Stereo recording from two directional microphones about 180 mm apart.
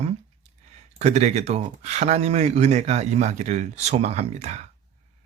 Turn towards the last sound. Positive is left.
turn(degrees=-40)  # may be behind; listen again after turning